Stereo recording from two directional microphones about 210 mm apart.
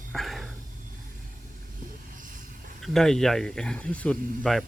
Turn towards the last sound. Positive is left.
turn(degrees=5)  # may be behind; listen again after turning